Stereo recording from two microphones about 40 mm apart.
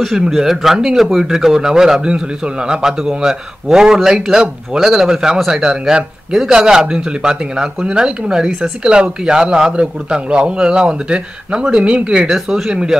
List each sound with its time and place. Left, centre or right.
0.4 s a man's voice: centre
12.4 s a man's voice: centre